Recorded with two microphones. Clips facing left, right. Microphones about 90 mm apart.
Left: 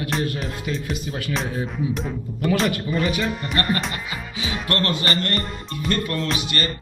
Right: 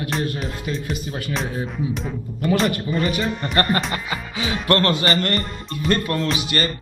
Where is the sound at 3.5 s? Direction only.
40° right (ahead or behind).